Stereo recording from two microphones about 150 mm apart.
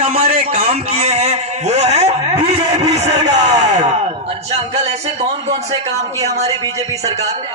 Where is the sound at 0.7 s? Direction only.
45° right (ahead or behind).